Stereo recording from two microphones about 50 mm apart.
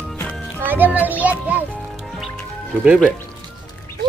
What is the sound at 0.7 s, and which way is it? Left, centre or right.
Music, right.